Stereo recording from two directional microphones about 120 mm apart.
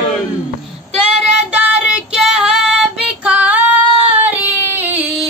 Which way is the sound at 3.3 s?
10° right (ahead or behind).